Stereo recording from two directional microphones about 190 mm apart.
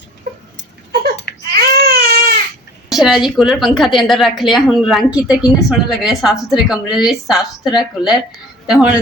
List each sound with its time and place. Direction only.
1.4 s baby cry: 55° right (ahead or behind)
2.9 s a woman's voice: centre (ahead or behind)